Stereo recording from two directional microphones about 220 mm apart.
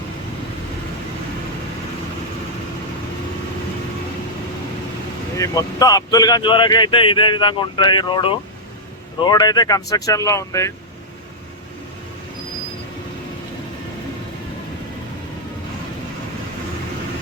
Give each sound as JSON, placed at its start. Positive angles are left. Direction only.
{"t": 5.4, "sound": "speech", "side_deg": 15}